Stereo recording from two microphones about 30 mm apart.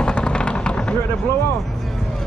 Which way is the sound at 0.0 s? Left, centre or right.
Left.